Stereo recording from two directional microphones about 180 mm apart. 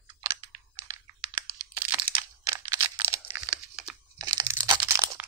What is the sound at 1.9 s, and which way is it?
Crunch, 10° right (ahead or behind).